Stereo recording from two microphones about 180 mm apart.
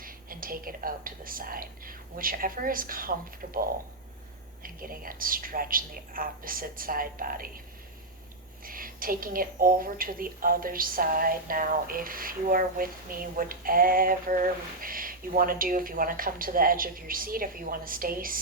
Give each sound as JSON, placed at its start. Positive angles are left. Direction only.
{"t": 0.0, "sound": "a woman's voice", "side_deg": -50}
{"t": 4.6, "sound": "a woman's voice", "side_deg": -50}
{"t": 8.6, "sound": "a woman's voice", "side_deg": -50}